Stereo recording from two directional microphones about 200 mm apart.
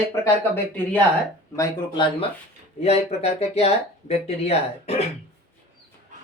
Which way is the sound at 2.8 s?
30° left (ahead or behind).